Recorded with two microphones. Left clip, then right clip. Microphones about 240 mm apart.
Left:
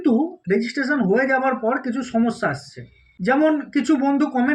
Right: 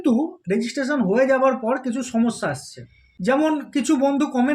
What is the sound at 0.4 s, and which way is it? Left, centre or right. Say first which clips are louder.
Speech: left 2 dB; centre.